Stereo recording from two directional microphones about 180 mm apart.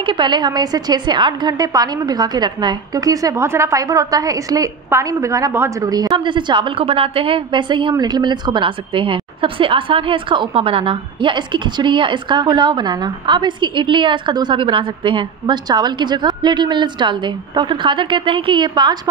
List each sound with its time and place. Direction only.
0.0 s a woman's voice: 25° right (ahead or behind)